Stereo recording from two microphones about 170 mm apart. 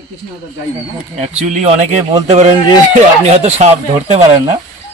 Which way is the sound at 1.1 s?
40° right (ahead or behind).